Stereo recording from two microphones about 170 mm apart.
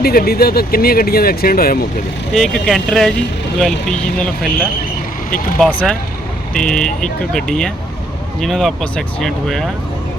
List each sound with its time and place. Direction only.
0.0 s speech: 65° left (ahead or behind)
2.3 s speech: centre (ahead or behind)
5.5 s speech: 5° left (ahead or behind)